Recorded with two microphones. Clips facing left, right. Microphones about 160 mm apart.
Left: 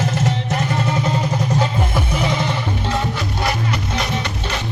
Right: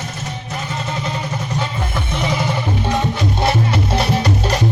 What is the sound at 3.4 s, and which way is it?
Music, 30° right (ahead or behind).